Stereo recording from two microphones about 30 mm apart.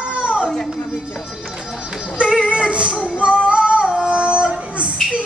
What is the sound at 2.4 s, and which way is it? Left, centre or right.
Music, right.